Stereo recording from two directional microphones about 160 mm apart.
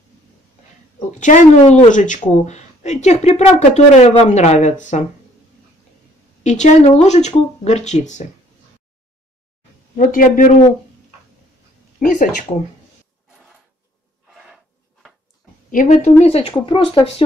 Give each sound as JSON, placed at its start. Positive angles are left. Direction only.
{"t": 1.2, "sound": "speech", "side_deg": 45}
{"t": 6.4, "sound": "speech", "side_deg": 45}
{"t": 9.9, "sound": "a man's voice", "side_deg": 55}
{"t": 12.0, "sound": "a man's voice", "side_deg": 55}
{"t": 14.4, "sound": "filing", "side_deg": 0}
{"t": 15.7, "sound": "speech", "side_deg": 50}